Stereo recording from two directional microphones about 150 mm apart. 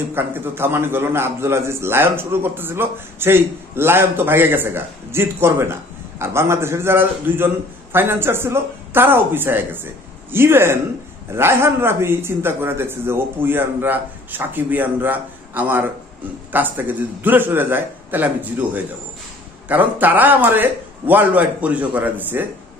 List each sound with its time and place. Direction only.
0.1 s a man's voice: 15° right (ahead or behind)